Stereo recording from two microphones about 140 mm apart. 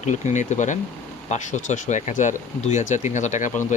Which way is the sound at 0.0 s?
60° left (ahead or behind).